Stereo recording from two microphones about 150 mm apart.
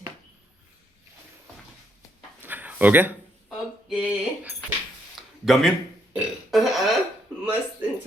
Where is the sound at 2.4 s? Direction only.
10° right (ahead or behind).